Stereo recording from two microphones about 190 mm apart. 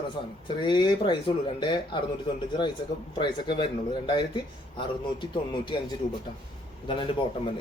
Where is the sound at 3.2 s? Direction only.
25° left (ahead or behind).